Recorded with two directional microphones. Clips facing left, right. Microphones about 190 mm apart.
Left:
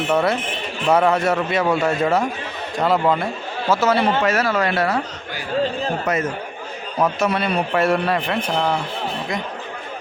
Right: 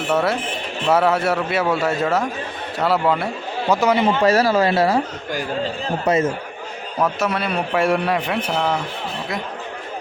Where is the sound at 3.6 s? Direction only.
15° right (ahead or behind).